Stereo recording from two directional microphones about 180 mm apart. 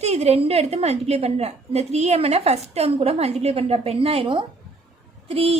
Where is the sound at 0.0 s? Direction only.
35° right (ahead or behind).